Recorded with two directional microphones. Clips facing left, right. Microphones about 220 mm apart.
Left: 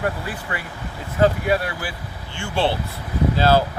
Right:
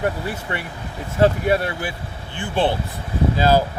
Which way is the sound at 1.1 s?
25° right (ahead or behind).